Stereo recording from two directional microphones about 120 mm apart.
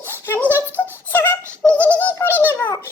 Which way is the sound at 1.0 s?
15° left (ahead or behind).